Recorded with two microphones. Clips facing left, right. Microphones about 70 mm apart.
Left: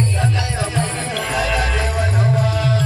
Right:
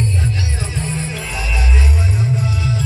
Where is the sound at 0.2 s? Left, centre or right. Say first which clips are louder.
Left 3 dB; left.